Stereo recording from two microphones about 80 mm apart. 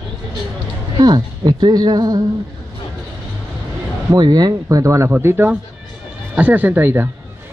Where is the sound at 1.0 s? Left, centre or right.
Right.